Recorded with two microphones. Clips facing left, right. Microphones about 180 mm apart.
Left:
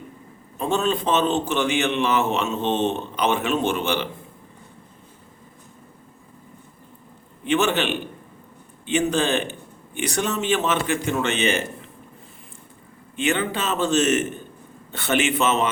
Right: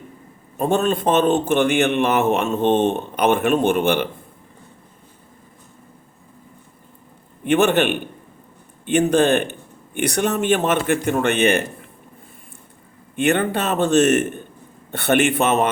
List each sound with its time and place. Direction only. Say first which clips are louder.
0.5 s a man's voice: right 4 dB; 55° right (ahead or behind)
7.4 s a man's voice: right 5 dB; 55° right (ahead or behind)
13.1 s a man's voice: right 5 dB; 55° right (ahead or behind)